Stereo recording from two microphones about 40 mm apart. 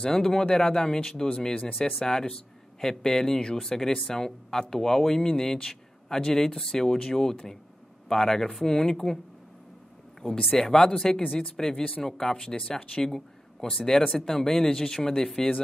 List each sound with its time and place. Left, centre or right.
0.0 s speech: centre
10.5 s speech: centre
13.0 s speech: centre